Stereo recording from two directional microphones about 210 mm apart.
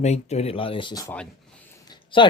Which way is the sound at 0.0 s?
30° left (ahead or behind).